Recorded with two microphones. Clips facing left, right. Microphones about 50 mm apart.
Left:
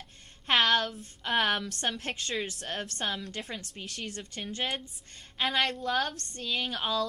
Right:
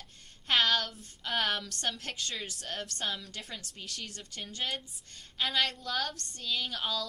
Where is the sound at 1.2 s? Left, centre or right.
Left.